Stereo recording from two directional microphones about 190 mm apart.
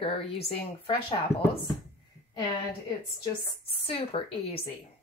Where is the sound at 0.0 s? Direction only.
30° left (ahead or behind).